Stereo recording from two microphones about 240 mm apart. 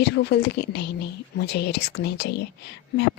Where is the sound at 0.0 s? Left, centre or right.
Left.